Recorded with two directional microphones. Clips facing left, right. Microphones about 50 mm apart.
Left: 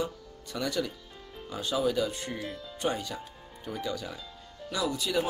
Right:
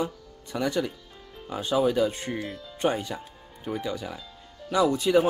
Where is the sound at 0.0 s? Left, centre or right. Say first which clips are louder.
Right 3 dB; right.